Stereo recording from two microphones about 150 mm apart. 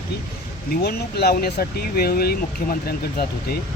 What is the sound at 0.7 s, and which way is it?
Speech, 90° left.